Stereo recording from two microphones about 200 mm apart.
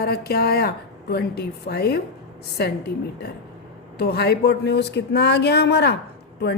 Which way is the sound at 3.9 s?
55° left (ahead or behind).